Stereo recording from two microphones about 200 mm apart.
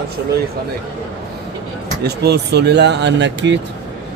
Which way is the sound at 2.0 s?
55° right (ahead or behind).